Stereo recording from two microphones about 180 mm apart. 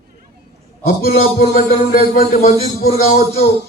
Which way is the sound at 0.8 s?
55° left (ahead or behind).